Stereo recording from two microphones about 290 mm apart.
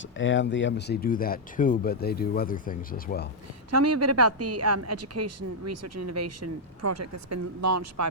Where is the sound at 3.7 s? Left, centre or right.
Right.